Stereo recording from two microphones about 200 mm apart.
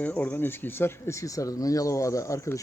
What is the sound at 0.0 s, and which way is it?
Speech, 5° left (ahead or behind).